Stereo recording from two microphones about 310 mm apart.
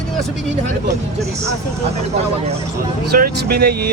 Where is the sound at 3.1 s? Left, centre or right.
Right.